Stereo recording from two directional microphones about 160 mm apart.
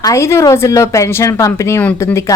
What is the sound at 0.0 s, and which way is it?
Speech, 20° left (ahead or behind).